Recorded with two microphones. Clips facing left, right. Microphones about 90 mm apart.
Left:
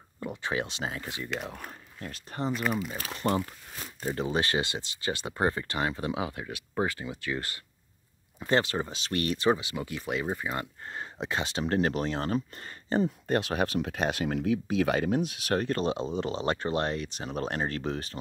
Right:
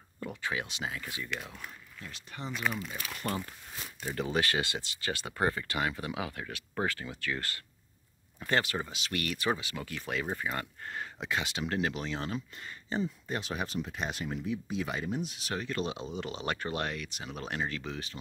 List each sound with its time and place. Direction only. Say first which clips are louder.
0.2 s a sound: left 2 dB; 20° left (ahead or behind)
0.5 s speech: left 4 dB; 30° left (ahead or behind)
1.4 s speech: left 6 dB; 50° left (ahead or behind)
2.5 s speech: left 2 dB; 5° left (ahead or behind)
2.9 s speech: left 7 dB; 30° left (ahead or behind)